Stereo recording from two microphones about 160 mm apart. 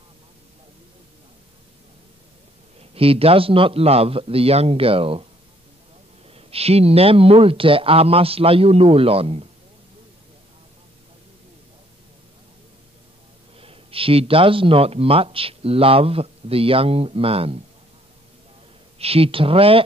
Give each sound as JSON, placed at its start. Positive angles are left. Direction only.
{"t": 2.8, "sound": "speech", "side_deg": -35}
{"t": 6.3, "sound": "speech", "side_deg": -40}
{"t": 13.6, "sound": "speech", "side_deg": -35}
{"t": 18.9, "sound": "speech", "side_deg": -35}